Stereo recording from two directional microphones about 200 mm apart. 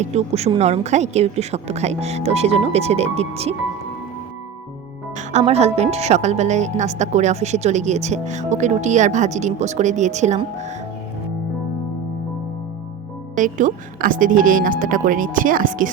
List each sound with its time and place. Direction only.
0.0 s a woman's voice: 35° right (ahead or behind)
5.1 s a woman's voice: 35° right (ahead or behind)
13.3 s a woman's voice: 40° right (ahead or behind)